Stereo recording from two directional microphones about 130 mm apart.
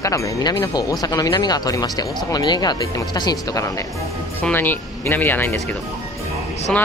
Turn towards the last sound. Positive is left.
turn(degrees=5)  # may be behind; listen again after turning